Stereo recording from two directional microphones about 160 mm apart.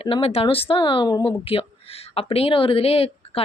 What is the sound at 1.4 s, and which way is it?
Speech, 35° left (ahead or behind).